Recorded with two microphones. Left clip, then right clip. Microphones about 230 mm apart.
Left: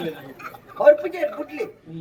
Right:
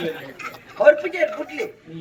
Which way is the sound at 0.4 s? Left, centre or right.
Left.